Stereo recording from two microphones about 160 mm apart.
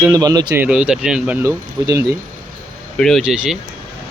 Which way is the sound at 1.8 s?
25° right (ahead or behind).